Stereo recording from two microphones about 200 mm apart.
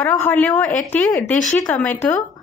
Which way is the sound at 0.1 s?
5° left (ahead or behind).